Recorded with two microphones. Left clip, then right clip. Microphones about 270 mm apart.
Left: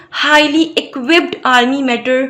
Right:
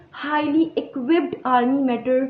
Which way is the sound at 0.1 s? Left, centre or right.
Left.